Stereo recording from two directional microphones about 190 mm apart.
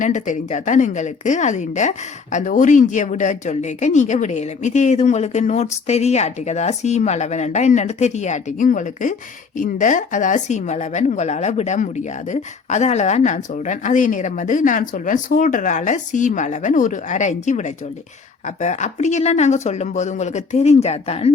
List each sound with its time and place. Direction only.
0.0 s a woman's voice: 40° left (ahead or behind)